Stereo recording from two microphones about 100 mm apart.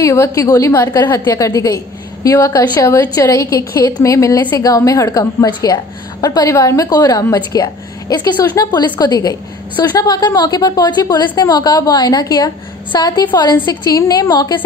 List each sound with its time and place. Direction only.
0.0 s a woman's voice: 30° left (ahead or behind)